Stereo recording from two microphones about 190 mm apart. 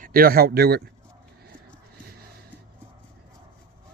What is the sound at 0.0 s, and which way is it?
Speech, 50° right (ahead or behind).